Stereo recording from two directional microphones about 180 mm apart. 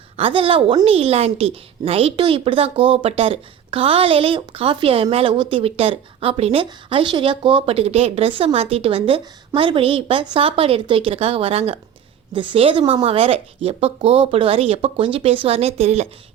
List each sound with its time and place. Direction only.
0.2 s a woman's voice: 30° right (ahead or behind)